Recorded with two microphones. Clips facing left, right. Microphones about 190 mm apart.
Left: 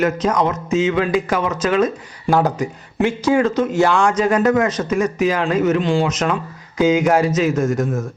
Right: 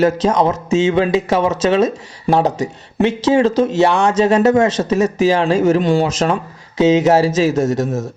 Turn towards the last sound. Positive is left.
turn(degrees=-25)  # may be behind; listen again after turning